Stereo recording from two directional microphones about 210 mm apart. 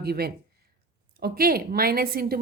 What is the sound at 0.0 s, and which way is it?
A woman's voice, 50° right (ahead or behind).